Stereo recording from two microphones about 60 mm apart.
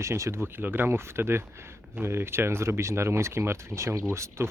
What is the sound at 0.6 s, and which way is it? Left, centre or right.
Speech, right.